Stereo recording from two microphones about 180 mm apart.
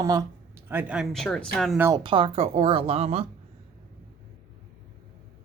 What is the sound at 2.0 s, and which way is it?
Speech, 30° right (ahead or behind).